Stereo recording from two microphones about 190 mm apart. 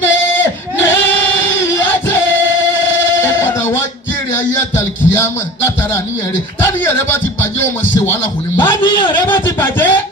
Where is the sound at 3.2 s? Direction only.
15° left (ahead or behind).